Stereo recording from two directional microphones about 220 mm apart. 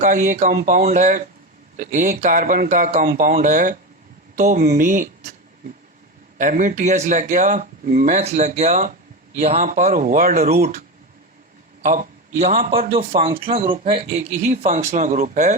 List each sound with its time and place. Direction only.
0.0 s speech: 35° right (ahead or behind)
6.4 s a man's voice: 35° right (ahead or behind)
12.7 s speech: 25° right (ahead or behind)